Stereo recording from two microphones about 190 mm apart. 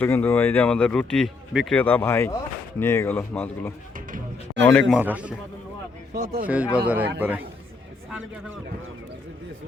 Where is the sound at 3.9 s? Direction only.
45° right (ahead or behind).